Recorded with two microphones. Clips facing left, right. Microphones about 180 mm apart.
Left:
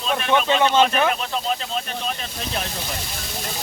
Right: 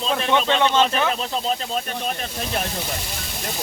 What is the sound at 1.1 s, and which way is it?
Speech, 35° right (ahead or behind).